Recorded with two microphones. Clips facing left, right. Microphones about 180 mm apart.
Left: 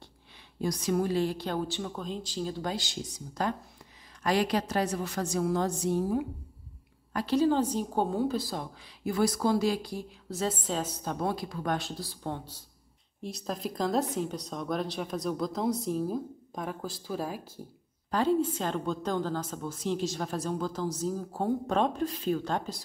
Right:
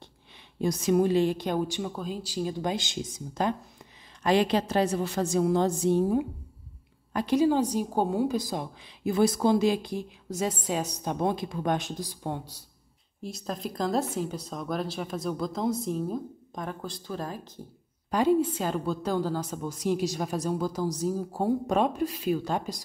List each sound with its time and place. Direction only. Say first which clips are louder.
0.6 s a woman's voice: right 5 dB; 25° right (ahead or behind)
13.2 s speech: even; centre (ahead or behind)
18.1 s a woman's voice: right 3 dB; 10° right (ahead or behind)